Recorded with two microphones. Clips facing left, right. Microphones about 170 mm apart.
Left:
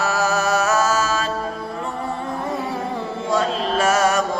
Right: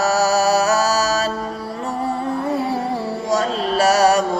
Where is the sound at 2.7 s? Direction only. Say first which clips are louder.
Right 4 dB; 35° right (ahead or behind).